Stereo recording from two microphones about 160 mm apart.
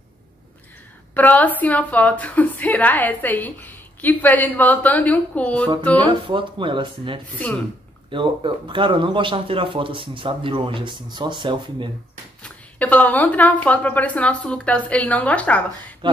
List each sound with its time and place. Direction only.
1.1 s a woman's voice: 10° left (ahead or behind)
6.0 s speech: 30° right (ahead or behind)
12.4 s a woman's voice: 10° left (ahead or behind)